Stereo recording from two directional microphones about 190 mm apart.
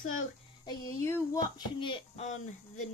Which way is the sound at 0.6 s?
15° left (ahead or behind).